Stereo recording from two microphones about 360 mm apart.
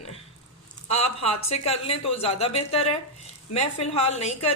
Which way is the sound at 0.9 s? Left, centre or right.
Centre.